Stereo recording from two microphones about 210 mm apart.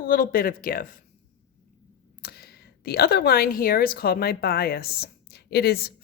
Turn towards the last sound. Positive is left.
turn(degrees=50)  # may be behind; listen again after turning